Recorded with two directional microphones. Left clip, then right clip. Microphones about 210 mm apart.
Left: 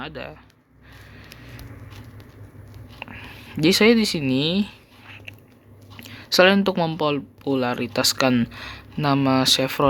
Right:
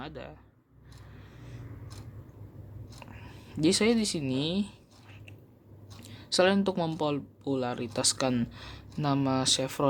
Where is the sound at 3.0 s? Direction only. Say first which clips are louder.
Left 13 dB; centre (ahead or behind).